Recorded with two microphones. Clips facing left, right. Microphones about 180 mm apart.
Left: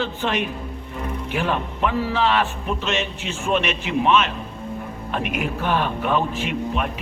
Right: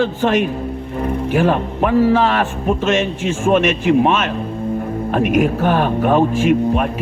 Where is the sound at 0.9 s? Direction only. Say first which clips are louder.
Right 9 dB; 45° right (ahead or behind).